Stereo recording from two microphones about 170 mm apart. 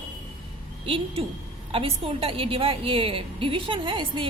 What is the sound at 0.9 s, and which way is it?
A woman's voice, 30° right (ahead or behind).